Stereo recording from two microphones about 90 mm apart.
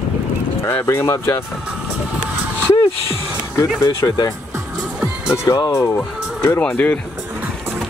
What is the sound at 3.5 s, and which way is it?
Speech, 35° left (ahead or behind).